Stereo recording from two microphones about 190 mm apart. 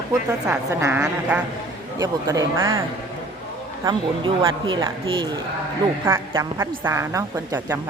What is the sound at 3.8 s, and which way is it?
Speech, 25° right (ahead or behind).